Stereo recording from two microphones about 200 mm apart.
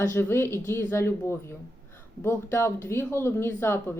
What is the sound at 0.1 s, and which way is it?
A woman's voice, 10° left (ahead or behind).